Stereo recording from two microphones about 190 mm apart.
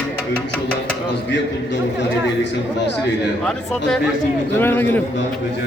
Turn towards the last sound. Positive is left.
turn(degrees=10)  # may be behind; listen again after turning